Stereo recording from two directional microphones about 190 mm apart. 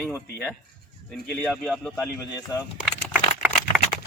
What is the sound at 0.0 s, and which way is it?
A man's voice, 5° left (ahead or behind).